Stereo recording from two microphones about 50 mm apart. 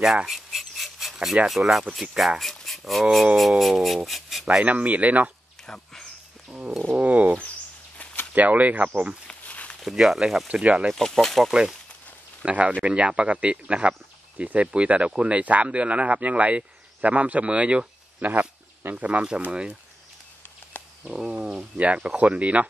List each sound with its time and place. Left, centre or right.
0.3 s rub: centre
1.5 s speech: centre
3.8 s a sound: centre
4.6 s speech: right
5.7 s speech: centre
7.0 s speech: right
9.3 s a sound: left
9.8 s speech: centre
10.5 s speech: right
11.0 s speech: centre
12.4 s speech: right
21.0 s speech: centre
21.4 s speech: right